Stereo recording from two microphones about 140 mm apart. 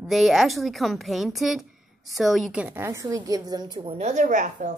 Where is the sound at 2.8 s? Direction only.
20° right (ahead or behind).